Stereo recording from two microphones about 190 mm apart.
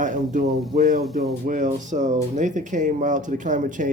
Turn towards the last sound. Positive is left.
turn(degrees=-45)  # may be behind; listen again after turning